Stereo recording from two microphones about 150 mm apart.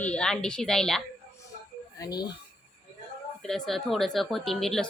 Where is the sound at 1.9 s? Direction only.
25° left (ahead or behind).